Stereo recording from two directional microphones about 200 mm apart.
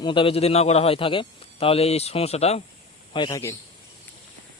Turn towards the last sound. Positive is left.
turn(degrees=15)  # may be behind; listen again after turning